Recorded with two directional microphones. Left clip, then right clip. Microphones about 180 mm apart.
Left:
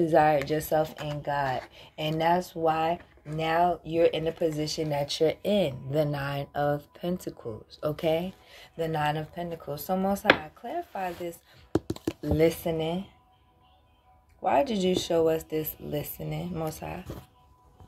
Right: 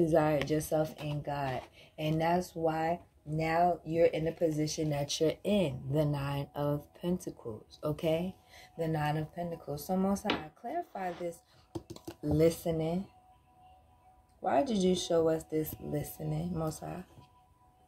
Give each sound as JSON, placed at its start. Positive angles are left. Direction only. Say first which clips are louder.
{"t": 0.1, "sound": "speech", "louder": "left 6 dB", "side_deg": -25}
{"t": 11.7, "sound": "computer keyboard", "louder": "left 14 dB", "side_deg": 35}
{"t": 12.4, "sound": "speech", "louder": "left 3 dB", "side_deg": -20}
{"t": 14.4, "sound": "speech", "louder": "left 5 dB", "side_deg": -20}